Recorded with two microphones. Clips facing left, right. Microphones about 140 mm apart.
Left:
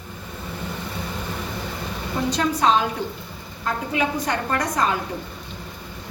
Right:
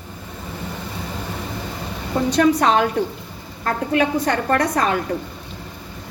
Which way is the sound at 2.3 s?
70° right (ahead or behind).